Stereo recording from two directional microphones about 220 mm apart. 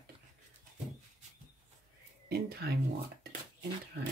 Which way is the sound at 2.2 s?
45° right (ahead or behind).